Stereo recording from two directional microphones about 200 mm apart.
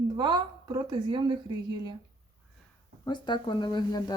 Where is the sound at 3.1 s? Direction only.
20° left (ahead or behind).